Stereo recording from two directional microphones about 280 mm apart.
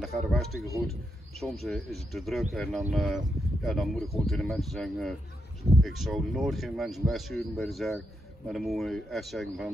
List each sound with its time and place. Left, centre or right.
0.0 s speech: centre